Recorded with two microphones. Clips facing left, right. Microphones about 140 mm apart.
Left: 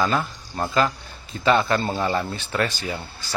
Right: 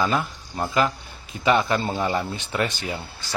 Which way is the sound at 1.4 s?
15° right (ahead or behind).